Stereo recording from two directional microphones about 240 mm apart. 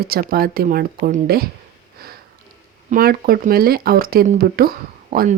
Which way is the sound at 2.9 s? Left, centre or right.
Right.